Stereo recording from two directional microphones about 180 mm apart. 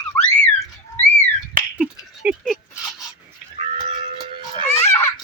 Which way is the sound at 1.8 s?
5° right (ahead or behind).